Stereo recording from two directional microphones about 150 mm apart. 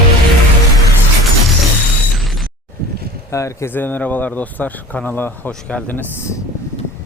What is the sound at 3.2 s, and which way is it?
Speech, 20° left (ahead or behind).